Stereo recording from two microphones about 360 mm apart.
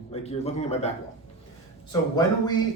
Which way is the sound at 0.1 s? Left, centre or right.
Centre.